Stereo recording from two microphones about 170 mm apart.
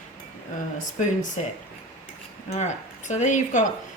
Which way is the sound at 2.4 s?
40° left (ahead or behind).